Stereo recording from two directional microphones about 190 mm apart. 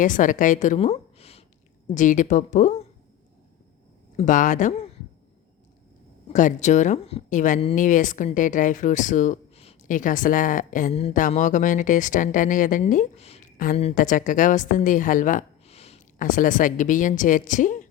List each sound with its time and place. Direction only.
0.0 s a woman's voice: 45° left (ahead or behind)
4.2 s speech: 40° left (ahead or behind)
6.2 s speech: 40° left (ahead or behind)
13.9 s speech: 45° left (ahead or behind)